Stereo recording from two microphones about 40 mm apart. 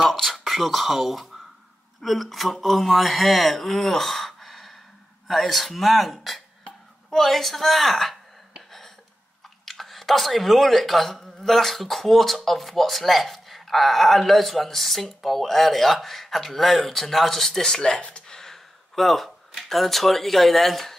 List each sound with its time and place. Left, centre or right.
0.0 s speech: centre
9.7 s speech: centre
18.2 s a sound: centre
19.7 s speech: centre